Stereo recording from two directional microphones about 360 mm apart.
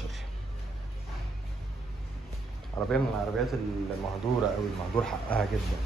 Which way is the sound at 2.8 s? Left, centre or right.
Centre.